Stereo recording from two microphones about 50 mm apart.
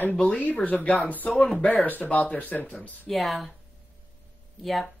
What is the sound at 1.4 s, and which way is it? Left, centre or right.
Speech, centre.